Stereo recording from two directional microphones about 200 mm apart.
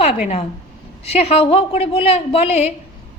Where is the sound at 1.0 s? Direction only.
30° left (ahead or behind).